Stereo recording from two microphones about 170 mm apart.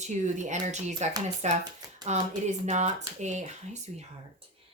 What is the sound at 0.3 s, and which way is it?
Speech, 45° right (ahead or behind).